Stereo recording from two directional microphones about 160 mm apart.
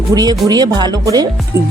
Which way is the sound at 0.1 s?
25° right (ahead or behind).